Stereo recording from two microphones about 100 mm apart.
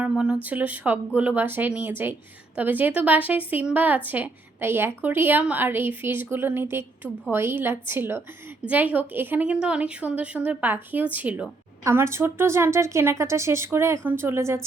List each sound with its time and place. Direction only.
0.0 s a woman's voice: 10° right (ahead or behind)
11.8 s a woman's voice: 25° right (ahead or behind)